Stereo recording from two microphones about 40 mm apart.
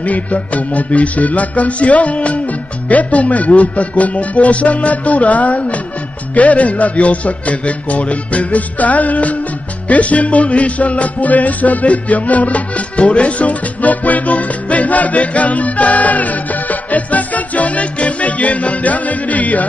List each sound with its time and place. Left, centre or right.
0.0 s a man's voice: left
9.8 s music: left